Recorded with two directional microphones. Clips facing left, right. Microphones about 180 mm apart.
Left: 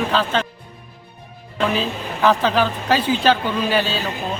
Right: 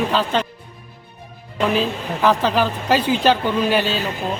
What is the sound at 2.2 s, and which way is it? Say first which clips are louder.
A man's voice: even; 10° right (ahead or behind).